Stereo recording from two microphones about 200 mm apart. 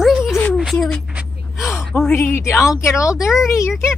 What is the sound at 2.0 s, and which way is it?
Speech, 10° left (ahead or behind).